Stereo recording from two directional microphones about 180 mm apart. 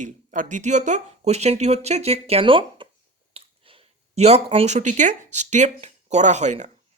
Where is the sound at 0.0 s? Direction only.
45° right (ahead or behind).